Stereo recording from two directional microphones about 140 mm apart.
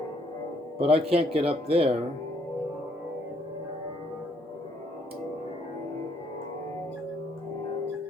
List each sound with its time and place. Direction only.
0.8 s speech: 45° right (ahead or behind)